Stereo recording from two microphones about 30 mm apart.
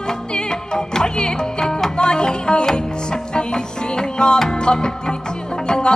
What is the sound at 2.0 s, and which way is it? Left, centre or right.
Music, left.